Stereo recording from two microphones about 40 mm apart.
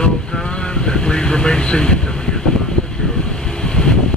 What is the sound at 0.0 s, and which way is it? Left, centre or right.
Vehicle, centre.